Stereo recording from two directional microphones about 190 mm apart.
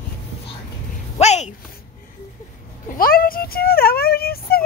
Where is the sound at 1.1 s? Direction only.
35° left (ahead or behind).